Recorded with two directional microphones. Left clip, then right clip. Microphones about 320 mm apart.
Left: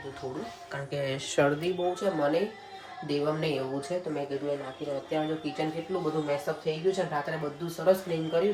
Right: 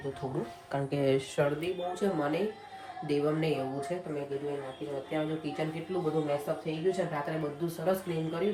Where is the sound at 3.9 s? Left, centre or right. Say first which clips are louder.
Left 4 dB; centre.